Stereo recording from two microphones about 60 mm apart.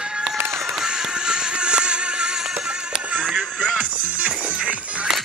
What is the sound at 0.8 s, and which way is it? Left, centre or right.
Music, centre.